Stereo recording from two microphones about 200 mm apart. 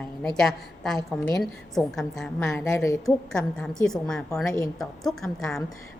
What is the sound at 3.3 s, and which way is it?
A woman's voice, 5° left (ahead or behind).